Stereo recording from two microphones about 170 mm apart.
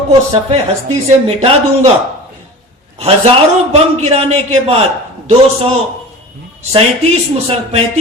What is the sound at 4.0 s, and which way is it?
A man's voice, 40° right (ahead or behind).